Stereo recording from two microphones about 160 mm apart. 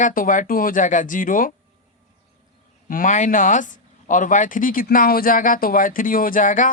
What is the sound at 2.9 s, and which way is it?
Speech, 55° left (ahead or behind).